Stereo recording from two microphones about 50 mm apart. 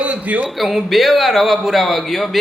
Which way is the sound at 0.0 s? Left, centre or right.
Right.